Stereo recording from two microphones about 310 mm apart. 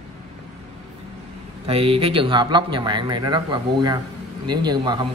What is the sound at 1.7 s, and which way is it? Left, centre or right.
A man's voice, centre.